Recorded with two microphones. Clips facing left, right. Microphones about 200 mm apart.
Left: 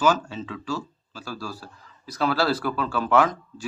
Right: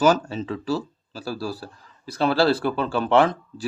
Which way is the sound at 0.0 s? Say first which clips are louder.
Right 3 dB; 40° right (ahead or behind).